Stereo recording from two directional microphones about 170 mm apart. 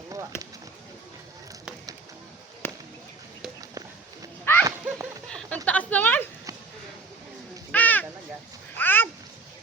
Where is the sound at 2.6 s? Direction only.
15° left (ahead or behind).